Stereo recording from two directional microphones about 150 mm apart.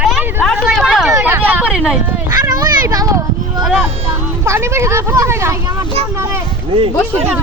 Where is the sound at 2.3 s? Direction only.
25° right (ahead or behind).